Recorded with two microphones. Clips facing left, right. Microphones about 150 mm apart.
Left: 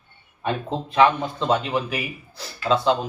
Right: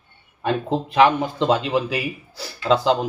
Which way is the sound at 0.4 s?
90° right.